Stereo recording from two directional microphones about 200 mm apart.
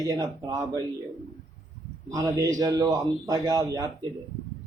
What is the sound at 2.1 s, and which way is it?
A man's voice, 15° right (ahead or behind).